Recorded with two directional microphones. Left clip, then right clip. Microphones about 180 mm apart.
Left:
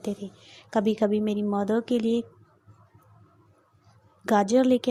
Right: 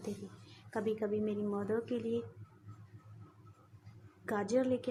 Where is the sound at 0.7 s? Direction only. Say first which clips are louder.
Left 11 dB; 40° left (ahead or behind).